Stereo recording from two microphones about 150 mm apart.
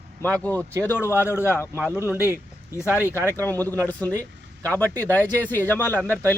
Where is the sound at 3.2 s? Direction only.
15° left (ahead or behind).